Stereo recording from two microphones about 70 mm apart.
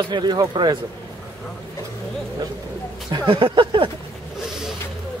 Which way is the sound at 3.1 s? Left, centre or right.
Right.